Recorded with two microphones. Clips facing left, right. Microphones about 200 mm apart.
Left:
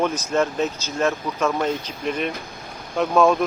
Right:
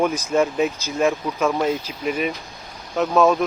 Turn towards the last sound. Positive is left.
turn(degrees=0)  # may be behind; listen again after turning